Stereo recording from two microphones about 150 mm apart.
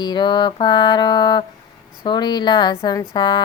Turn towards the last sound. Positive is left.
turn(degrees=30)  # may be behind; listen again after turning